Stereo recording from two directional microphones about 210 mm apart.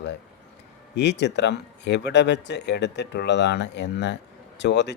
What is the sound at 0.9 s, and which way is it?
Speech, 55° left (ahead or behind).